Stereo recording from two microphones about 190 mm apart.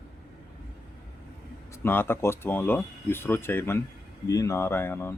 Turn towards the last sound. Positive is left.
turn(degrees=10)  # may be behind; listen again after turning